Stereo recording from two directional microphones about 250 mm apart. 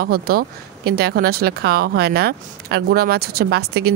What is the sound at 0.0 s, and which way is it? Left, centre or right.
Speech, right.